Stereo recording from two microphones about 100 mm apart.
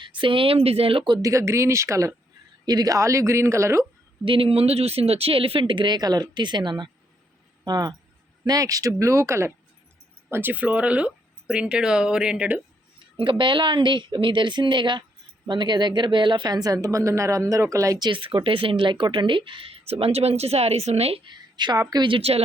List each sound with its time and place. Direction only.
0.0 s speech: 55° right (ahead or behind)
1.2 s speech: 30° right (ahead or behind)
4.3 s a woman's voice: 65° right (ahead or behind); by 12.6 s 10° right (ahead or behind)
13.1 s a woman's voice: 60° right (ahead or behind); by 18.0 s 30° right (ahead or behind)
18.0 s speech: 55° right (ahead or behind); by 21.2 s 90° right
21.2 s a woman's voice: 45° right (ahead or behind)
22.0 s a woman's voice: 75° right (ahead or behind); by 22.4 s 90° right